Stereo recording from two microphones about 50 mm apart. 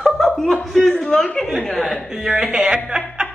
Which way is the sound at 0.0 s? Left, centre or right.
Centre.